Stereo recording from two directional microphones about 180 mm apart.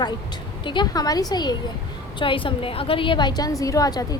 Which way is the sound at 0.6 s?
25° left (ahead or behind).